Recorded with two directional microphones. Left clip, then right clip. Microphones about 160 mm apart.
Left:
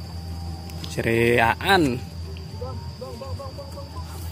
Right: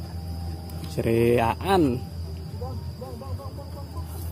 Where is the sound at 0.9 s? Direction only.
10° right (ahead or behind).